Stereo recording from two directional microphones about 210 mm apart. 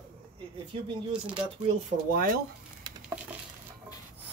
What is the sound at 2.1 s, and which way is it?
Speech, 45° right (ahead or behind).